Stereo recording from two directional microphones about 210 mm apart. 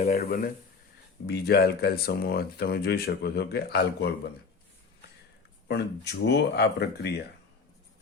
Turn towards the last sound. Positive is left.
turn(degrees=50)  # may be behind; listen again after turning